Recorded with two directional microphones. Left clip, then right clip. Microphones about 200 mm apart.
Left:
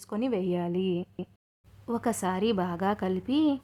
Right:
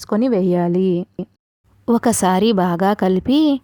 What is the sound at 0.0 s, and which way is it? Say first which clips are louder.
Speech: right 12 dB; 35° right (ahead or behind).